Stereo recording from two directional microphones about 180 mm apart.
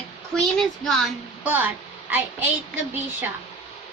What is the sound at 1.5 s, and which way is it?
Speech, 10° right (ahead or behind).